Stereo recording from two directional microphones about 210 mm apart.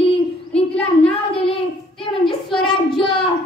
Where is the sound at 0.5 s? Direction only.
5° left (ahead or behind).